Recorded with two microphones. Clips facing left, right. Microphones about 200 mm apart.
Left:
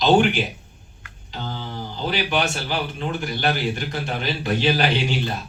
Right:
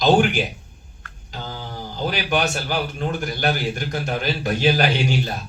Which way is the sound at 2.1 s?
45° right (ahead or behind).